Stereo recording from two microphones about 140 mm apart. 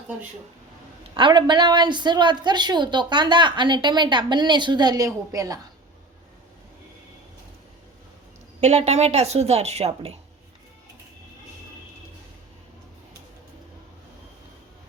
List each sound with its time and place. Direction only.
1.1 s a woman's voice: 35° right (ahead or behind)
8.6 s a woman's voice: 50° right (ahead or behind)